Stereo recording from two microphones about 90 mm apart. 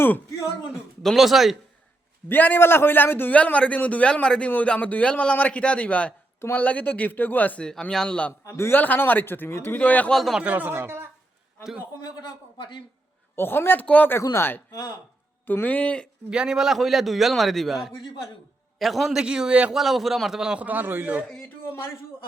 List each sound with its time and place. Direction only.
1.0 s a man's voice: centre (ahead or behind)
2.3 s a man's voice: 20° left (ahead or behind)
8.4 s a man's voice: 30° left (ahead or behind)
10.2 s a man's voice: centre (ahead or behind)
10.4 s speech: 20° right (ahead or behind)
12.5 s speech: 60° left (ahead or behind)
13.3 s a man's voice: 25° left (ahead or behind)
14.7 s speech: 40° left (ahead or behind)
15.4 s a man's voice: 20° left (ahead or behind)
16.3 s a man's voice: 10° right (ahead or behind)
19.7 s a man's voice: centre (ahead or behind)
20.7 s speech: 20° right (ahead or behind)